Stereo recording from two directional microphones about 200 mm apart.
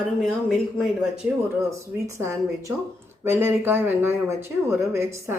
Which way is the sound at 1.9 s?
15° right (ahead or behind).